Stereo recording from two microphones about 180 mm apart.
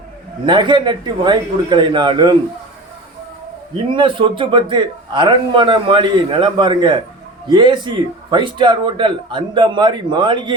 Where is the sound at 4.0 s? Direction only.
25° right (ahead or behind).